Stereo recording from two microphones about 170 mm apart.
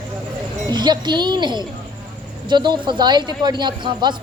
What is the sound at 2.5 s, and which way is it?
Speech, 25° right (ahead or behind).